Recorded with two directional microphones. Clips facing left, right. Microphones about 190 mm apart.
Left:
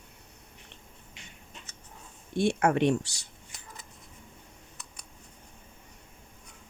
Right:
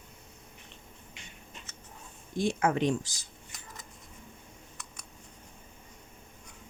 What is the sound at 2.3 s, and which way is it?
Speech, 65° left (ahead or behind).